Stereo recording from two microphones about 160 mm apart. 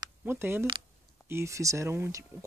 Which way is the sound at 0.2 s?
15° right (ahead or behind).